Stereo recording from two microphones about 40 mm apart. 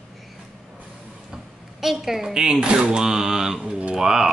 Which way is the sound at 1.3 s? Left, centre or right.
Centre.